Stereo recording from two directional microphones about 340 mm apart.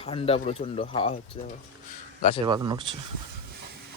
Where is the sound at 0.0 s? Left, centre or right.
Centre.